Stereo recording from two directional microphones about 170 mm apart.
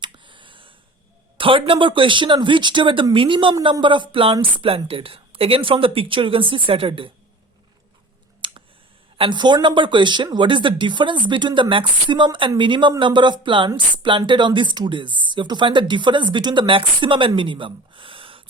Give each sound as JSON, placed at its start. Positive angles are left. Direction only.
{"t": 0.0, "sound": "a sound", "side_deg": -30}
{"t": 1.4, "sound": "speech", "side_deg": -30}
{"t": 8.4, "sound": "clicking", "side_deg": -30}
{"t": 9.1, "sound": "speech", "side_deg": -30}